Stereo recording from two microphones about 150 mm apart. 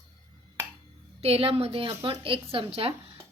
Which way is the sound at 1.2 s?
40° right (ahead or behind).